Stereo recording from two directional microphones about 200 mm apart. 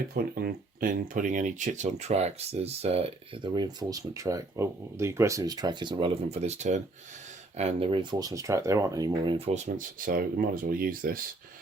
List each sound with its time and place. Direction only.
0.1 s speech: 50° right (ahead or behind); by 9.5 s 20° right (ahead or behind)
9.7 s speech: 45° right (ahead or behind)